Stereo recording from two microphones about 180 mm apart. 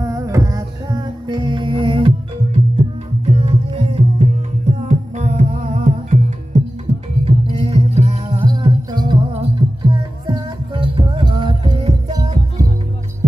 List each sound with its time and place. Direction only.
0.0 s music: 20° right (ahead or behind); by 8.5 s 35° right (ahead or behind)
8.5 s music: 25° right (ahead or behind)